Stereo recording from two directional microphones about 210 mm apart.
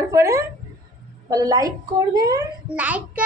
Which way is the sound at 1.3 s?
15° right (ahead or behind).